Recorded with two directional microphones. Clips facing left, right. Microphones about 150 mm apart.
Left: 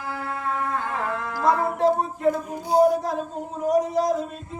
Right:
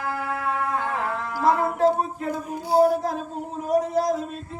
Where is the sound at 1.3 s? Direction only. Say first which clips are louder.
Right 1 dB; 5° right (ahead or behind).